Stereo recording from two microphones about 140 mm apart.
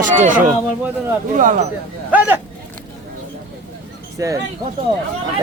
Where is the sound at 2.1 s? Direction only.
10° right (ahead or behind).